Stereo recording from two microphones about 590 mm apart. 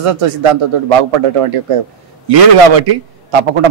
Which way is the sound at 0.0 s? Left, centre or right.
Right.